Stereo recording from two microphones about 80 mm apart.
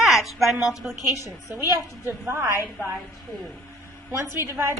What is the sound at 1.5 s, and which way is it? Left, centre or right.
A woman's voice, right.